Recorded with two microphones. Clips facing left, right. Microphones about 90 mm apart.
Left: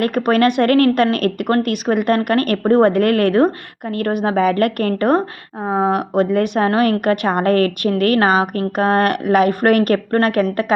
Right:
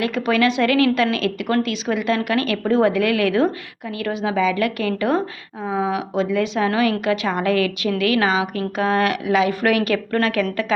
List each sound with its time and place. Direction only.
0.0 s a woman's voice: 55° left (ahead or behind)